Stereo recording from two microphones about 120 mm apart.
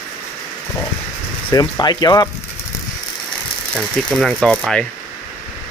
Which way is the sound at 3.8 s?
5° left (ahead or behind).